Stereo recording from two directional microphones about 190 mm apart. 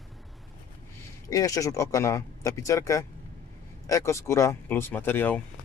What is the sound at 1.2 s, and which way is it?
Speech, 20° left (ahead or behind).